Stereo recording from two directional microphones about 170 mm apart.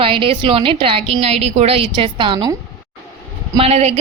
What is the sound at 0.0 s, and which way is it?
A woman's voice, 30° right (ahead or behind).